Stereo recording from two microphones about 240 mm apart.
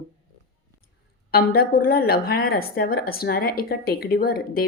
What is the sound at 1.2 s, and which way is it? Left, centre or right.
A woman's voice, left.